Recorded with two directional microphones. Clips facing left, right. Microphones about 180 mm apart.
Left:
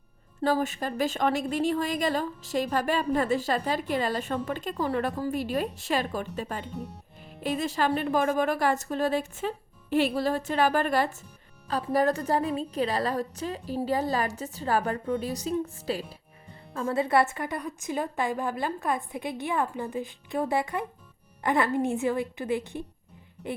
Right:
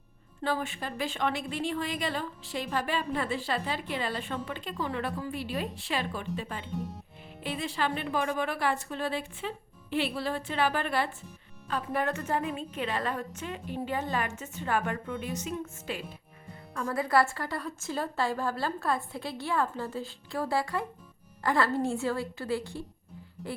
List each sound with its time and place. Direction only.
0.4 s a woman's voice: 40° left (ahead or behind)
16.7 s a woman's voice: 25° left (ahead or behind)